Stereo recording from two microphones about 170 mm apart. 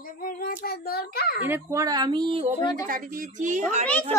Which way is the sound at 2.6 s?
25° left (ahead or behind).